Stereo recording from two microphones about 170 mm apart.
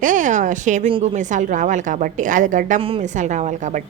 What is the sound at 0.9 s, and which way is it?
Speech, 30° right (ahead or behind).